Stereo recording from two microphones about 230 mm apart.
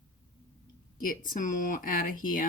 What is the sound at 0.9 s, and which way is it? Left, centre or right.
Speech, left.